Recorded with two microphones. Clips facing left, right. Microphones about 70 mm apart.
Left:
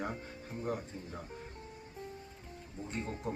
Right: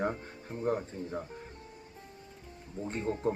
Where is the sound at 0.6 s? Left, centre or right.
Right.